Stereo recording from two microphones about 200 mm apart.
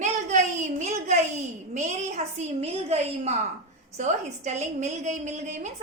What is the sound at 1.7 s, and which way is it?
A woman's voice, 35° right (ahead or behind).